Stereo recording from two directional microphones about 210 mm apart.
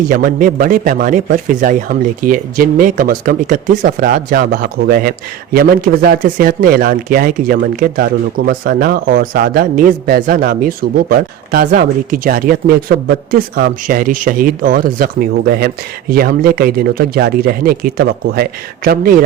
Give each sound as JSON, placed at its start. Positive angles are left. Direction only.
{"t": 0.1, "sound": "a man's voice", "side_deg": -40}